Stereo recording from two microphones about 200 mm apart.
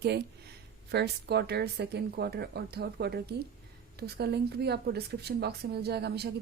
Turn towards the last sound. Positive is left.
turn(degrees=-55)  # may be behind; listen again after turning